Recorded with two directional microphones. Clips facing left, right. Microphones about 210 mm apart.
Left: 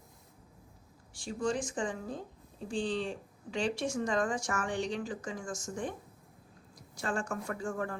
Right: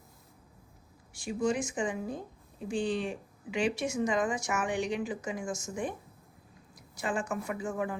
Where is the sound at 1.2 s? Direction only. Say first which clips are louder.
Right 3 dB; 10° right (ahead or behind).